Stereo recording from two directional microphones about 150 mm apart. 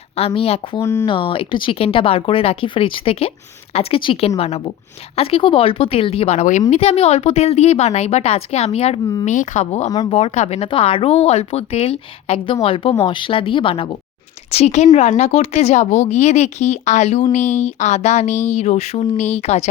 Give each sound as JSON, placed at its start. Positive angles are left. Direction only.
{"t": 0.2, "sound": "speech", "side_deg": 40}
{"t": 0.8, "sound": "speech", "side_deg": 15}
{"t": 1.0, "sound": "a woman's voice", "side_deg": 35}
{"t": 9.2, "sound": "a woman's voice", "side_deg": 55}
{"t": 10.7, "sound": "speech", "side_deg": 35}
{"t": 14.5, "sound": "a woman's voice", "side_deg": 45}